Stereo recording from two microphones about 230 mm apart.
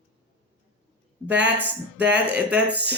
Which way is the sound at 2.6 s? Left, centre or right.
Right.